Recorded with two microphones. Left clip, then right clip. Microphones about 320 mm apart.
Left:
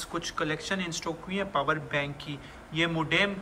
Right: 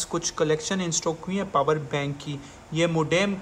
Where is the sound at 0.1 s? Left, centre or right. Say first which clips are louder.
Right 7 dB; centre.